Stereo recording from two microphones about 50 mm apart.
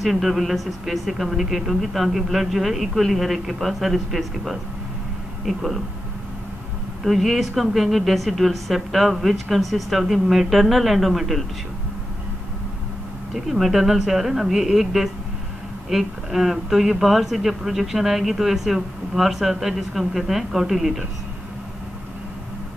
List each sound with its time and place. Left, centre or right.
0.0 s a woman's voice: centre
7.0 s a woman's voice: centre
13.3 s a woman's voice: centre